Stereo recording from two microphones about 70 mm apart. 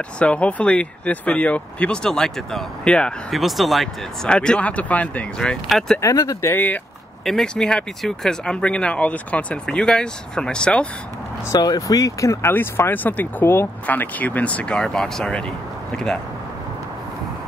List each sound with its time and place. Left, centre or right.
0.2 s speech: centre
2.0 s speech: centre
3.3 s speech: centre
4.3 s speech: centre
5.9 s speech: left
6.5 s speech: left
7.2 s speech: centre
11.5 s speech: left
12.4 s speech: left; by 16.2 s centre